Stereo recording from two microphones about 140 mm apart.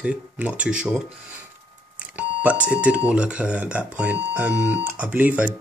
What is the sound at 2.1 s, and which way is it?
Speech, 10° right (ahead or behind).